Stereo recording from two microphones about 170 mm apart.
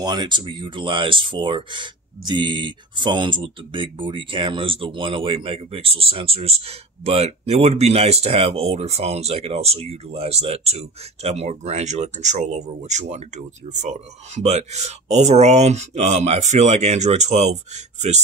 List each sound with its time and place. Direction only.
0.0 s speech: 25° right (ahead or behind); by 17.5 s 40° right (ahead or behind)